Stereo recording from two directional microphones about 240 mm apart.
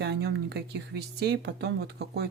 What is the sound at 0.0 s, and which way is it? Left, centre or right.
Speech, right.